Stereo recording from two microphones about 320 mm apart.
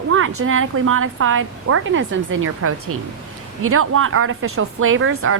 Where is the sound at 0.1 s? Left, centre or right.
Right.